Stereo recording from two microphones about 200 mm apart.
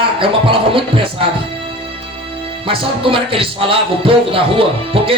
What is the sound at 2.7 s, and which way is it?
Music, 25° right (ahead or behind).